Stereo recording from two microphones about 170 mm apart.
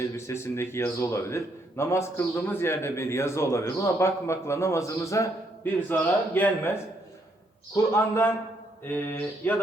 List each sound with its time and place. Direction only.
0.0 s a man's voice: 15° left (ahead or behind)